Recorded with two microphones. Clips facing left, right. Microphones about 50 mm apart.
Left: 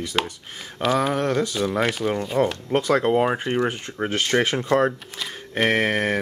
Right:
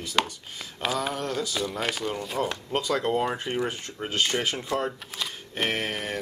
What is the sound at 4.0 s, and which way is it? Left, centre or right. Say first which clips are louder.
Speech: left 5 dB; left.